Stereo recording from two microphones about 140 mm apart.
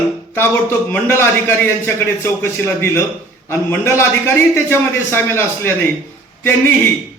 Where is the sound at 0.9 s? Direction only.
15° left (ahead or behind).